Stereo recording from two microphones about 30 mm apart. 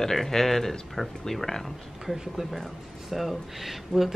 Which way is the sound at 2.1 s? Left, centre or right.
Centre.